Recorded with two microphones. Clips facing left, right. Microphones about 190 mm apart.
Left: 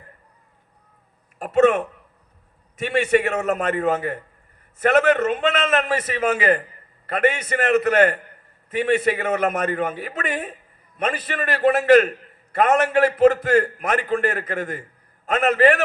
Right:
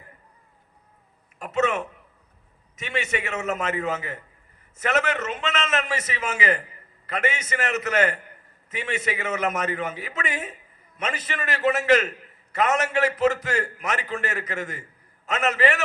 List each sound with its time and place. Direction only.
1.4 s a man's voice: 45° left (ahead or behind)
3.7 s a man's voice: 55° left (ahead or behind)